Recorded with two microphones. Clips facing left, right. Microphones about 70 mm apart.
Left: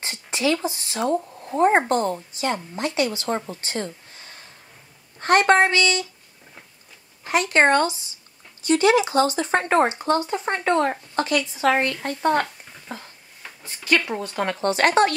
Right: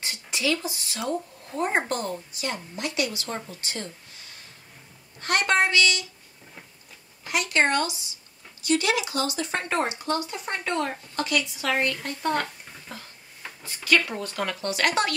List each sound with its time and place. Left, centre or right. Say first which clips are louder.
0.0 s speech: left 4 dB; left
7.2 s speech: left 6 dB; left